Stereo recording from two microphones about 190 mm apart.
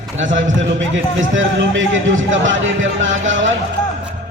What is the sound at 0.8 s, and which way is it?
A man's voice, 90° right.